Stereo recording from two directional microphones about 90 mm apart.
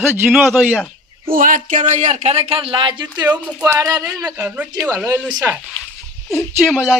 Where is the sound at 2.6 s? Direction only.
80° right; by 3.2 s 60° right (ahead or behind).